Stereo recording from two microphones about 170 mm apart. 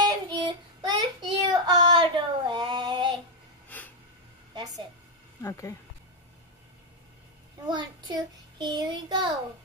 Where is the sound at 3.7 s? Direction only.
10° left (ahead or behind).